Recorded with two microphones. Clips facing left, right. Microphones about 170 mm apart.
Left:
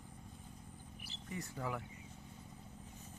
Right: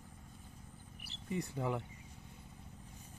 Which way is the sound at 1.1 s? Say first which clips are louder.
Left 1 dB; 60° right (ahead or behind).